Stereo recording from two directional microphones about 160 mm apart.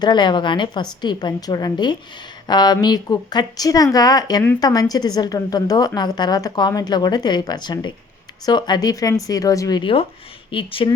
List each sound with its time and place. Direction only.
0.0 s a woman's voice: 25° left (ahead or behind)